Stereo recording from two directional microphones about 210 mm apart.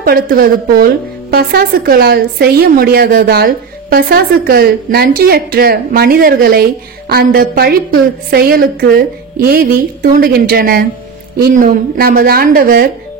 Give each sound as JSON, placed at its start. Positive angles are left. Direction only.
{"t": 0.0, "sound": "a woman's voice", "side_deg": -45}